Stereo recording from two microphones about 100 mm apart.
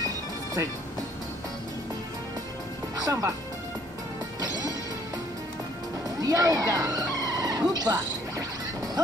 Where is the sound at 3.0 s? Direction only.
35° right (ahead or behind).